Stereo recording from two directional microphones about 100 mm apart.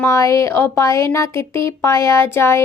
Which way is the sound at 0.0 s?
30° left (ahead or behind).